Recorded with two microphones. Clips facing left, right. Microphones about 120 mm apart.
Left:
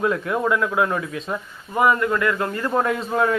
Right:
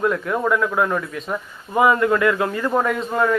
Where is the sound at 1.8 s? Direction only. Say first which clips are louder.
Right 3 dB; 20° right (ahead or behind).